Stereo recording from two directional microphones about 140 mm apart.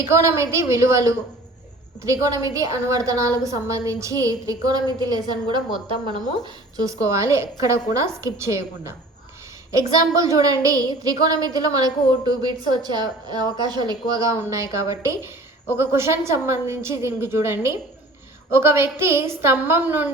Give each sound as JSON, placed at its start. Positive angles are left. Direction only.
{"t": 0.0, "sound": "a woman's voice", "side_deg": -20}